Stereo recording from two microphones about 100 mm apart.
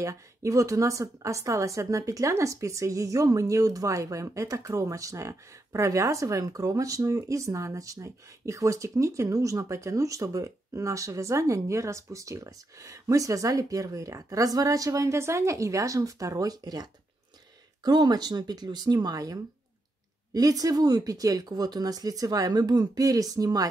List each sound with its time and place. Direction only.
0.0 s a woman's voice: 30° right (ahead or behind)